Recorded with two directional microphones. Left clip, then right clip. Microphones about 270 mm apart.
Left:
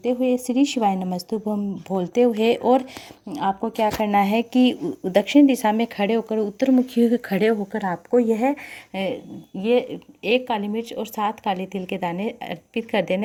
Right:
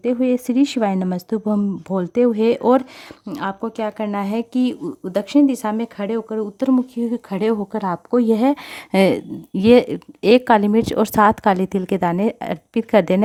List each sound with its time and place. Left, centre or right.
0.3 s speech: right
6.9 s speech: centre; by 8.5 s right
8.9 s speech: right
10.8 s speech: right
12.1 s speech: right
12.4 s speech: right